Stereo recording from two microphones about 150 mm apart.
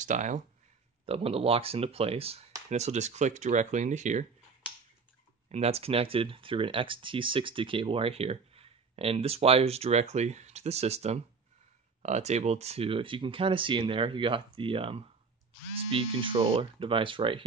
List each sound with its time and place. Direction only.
0.0 s speech: 55° right (ahead or behind)
1.0 s speech: 40° right (ahead or behind)
5.5 s speech: 45° right (ahead or behind)